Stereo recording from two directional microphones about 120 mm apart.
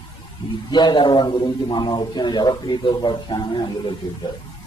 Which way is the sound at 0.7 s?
40° left (ahead or behind).